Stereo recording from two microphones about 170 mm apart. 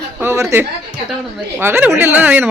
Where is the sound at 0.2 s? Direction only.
15° right (ahead or behind).